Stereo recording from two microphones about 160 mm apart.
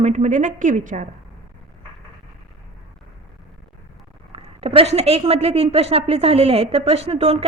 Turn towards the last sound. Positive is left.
turn(degrees=-40)  # may be behind; listen again after turning